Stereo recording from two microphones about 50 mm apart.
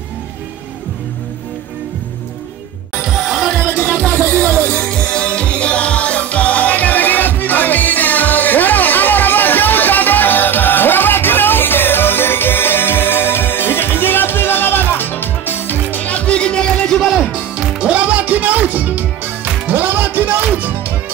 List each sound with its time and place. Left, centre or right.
3.0 s music: centre
4.6 s music: left
17.3 s music: right